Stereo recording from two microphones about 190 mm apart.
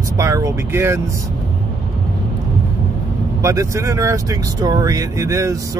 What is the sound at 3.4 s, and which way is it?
Speech, 15° right (ahead or behind).